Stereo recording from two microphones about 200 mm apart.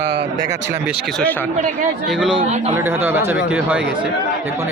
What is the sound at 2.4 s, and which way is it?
Speech, 35° right (ahead or behind).